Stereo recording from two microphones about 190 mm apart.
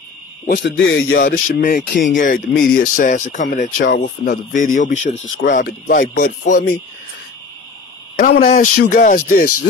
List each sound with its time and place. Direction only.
0.6 s speech: 75° left (ahead or behind)
1.1 s speech: 50° left (ahead or behind)
8.2 s speech: 45° left (ahead or behind)